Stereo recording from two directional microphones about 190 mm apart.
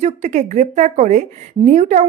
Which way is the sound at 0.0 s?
40° right (ahead or behind).